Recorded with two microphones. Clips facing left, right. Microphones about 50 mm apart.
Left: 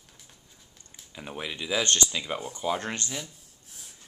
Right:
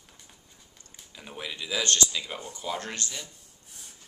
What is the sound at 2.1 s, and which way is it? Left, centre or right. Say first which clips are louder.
Speech: left 3 dB; centre.